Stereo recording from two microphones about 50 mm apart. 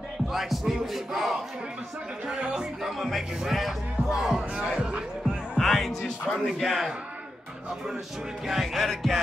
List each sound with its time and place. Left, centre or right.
0.3 s speech: centre
2.2 s speech: centre
3.0 s speech: centre
5.6 s music: centre
6.4 s speech: centre
8.5 s speech: centre